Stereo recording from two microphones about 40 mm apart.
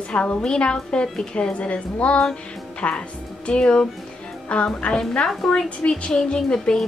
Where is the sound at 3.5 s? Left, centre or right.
Left.